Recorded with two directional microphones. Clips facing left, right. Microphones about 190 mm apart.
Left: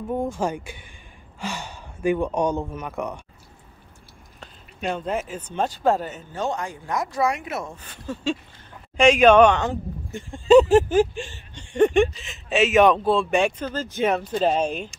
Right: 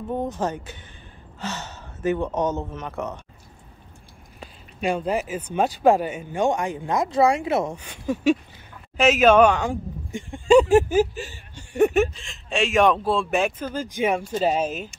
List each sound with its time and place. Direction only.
0.2 s speech: 10° left (ahead or behind)
4.4 s a sound: 10° right (ahead or behind)
5.3 s speech: 10° right (ahead or behind); by 7.7 s 25° right (ahead or behind)
7.7 s speech: 10° right (ahead or behind)